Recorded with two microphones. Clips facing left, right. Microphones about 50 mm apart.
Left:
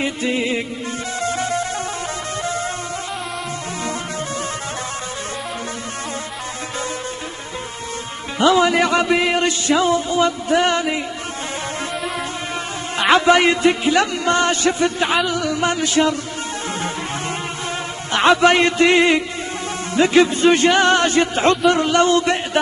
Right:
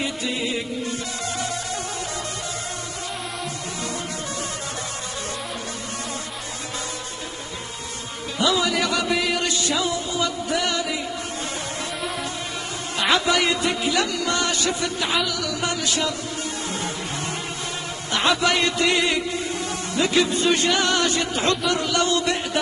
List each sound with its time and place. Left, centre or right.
0.0 s a man's voice: left
1.2 s music: left
8.4 s a man's voice: left
12.9 s a man's voice: left
18.1 s a man's voice: left